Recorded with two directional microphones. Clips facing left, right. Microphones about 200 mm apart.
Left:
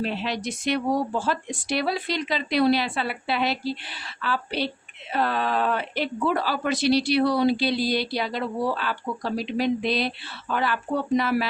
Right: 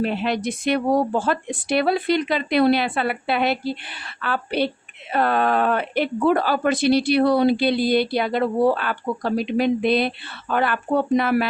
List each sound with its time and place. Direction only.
0.0 s speech: 55° right (ahead or behind)